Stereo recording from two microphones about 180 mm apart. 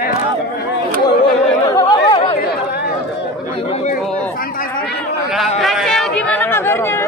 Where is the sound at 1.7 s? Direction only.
20° left (ahead or behind).